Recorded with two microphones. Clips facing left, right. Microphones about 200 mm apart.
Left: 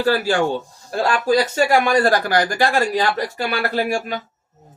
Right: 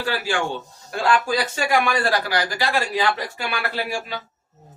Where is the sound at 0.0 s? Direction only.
40° left (ahead or behind).